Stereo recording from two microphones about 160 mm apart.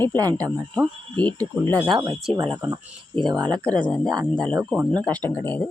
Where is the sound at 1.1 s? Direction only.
10° left (ahead or behind).